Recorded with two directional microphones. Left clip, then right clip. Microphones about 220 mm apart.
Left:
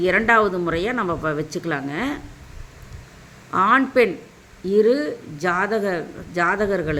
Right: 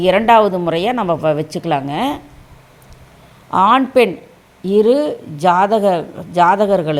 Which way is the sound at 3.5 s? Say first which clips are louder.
Right 5 dB; 25° right (ahead or behind).